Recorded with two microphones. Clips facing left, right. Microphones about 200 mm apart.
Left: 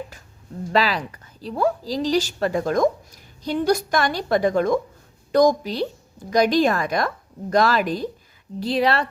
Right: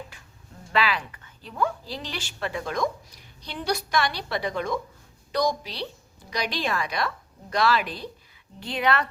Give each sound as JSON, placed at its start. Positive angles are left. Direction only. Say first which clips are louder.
{"t": 0.7, "sound": "a woman's voice", "louder": "left 4 dB", "side_deg": 40}
{"t": 8.6, "sound": "speech", "louder": "left 5 dB", "side_deg": 35}